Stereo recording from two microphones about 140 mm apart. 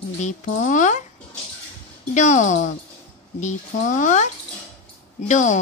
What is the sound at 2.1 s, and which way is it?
Speech, 60° left (ahead or behind).